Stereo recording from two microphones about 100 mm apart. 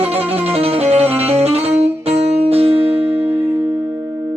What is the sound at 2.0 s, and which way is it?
Music, 90° right.